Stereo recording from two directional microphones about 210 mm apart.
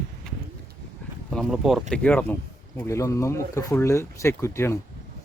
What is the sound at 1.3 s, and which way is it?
Speech, centre (ahead or behind).